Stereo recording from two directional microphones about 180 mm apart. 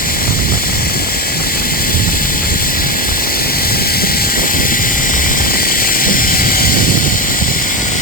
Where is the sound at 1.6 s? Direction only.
55° left (ahead or behind).